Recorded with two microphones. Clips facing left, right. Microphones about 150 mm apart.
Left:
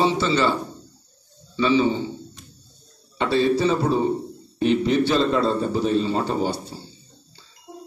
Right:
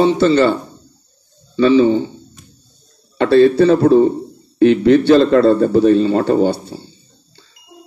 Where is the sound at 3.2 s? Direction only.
60° right (ahead or behind).